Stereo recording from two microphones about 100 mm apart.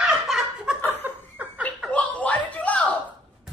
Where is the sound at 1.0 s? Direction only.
20° right (ahead or behind).